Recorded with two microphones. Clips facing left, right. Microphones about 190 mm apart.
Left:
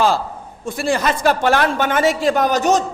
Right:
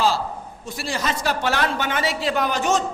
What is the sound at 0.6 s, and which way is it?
Speech, 50° left (ahead or behind).